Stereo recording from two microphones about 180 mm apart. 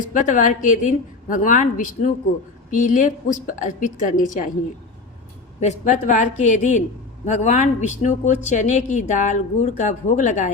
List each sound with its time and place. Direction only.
0.1 s a woman's voice: 45° left (ahead or behind)
5.5 s a woman's voice: 40° left (ahead or behind)